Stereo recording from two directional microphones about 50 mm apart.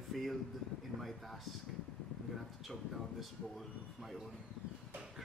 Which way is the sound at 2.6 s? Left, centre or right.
Centre.